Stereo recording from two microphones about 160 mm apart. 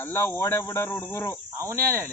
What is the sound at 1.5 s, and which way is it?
Cricket, 15° right (ahead or behind).